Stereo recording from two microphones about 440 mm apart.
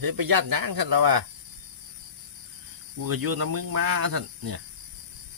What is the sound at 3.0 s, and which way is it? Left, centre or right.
Speech, right.